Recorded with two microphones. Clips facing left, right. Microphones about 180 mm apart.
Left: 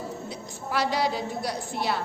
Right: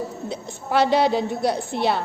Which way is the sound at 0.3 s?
25° right (ahead or behind).